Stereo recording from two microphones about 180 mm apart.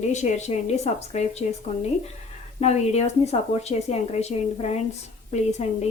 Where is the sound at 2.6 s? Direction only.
35° left (ahead or behind).